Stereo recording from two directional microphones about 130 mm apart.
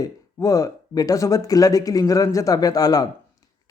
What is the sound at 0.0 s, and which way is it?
A man's voice, 25° left (ahead or behind).